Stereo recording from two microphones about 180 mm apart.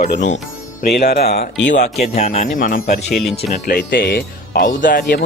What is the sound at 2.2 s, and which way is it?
Speech, 40° left (ahead or behind).